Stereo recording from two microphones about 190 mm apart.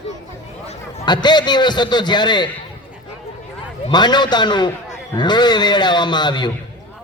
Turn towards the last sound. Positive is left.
turn(degrees=25)  # may be behind; listen again after turning